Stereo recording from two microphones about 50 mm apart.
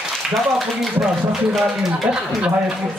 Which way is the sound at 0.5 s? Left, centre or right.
Centre.